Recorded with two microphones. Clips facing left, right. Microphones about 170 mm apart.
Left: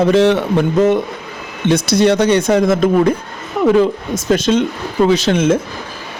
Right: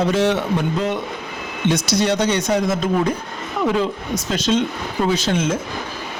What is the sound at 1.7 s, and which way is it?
Speech, 55° left (ahead or behind).